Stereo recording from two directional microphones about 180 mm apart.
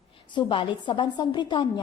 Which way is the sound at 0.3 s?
25° left (ahead or behind).